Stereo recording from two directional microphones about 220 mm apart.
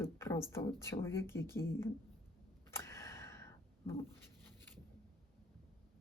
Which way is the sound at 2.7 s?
10° left (ahead or behind).